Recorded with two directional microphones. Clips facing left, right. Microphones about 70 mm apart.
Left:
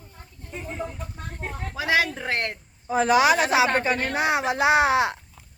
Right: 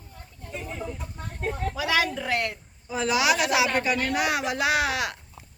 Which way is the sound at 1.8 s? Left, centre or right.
Left.